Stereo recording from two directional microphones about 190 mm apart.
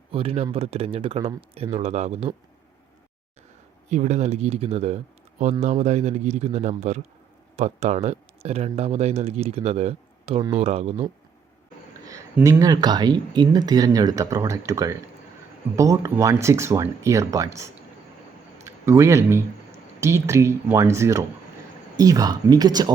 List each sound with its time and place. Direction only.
0.1 s speech: 30° right (ahead or behind)
3.8 s speech: 40° right (ahead or behind)
12.0 s speech: 15° right (ahead or behind)